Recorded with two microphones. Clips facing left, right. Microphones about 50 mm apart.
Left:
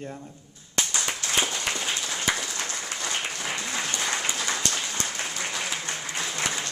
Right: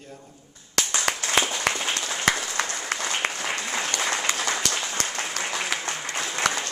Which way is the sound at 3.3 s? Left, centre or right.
Right.